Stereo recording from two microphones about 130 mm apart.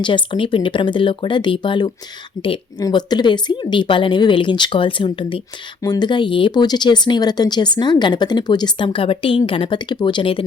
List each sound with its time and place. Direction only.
0.0 s a woman's voice: 40° left (ahead or behind)